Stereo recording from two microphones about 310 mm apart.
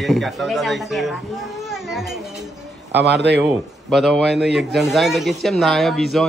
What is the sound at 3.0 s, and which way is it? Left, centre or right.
Speech, right.